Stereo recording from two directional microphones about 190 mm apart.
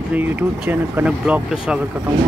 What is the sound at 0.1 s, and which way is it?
Speech, 10° right (ahead or behind).